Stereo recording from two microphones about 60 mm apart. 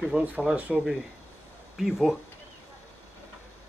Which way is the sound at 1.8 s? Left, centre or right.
Centre.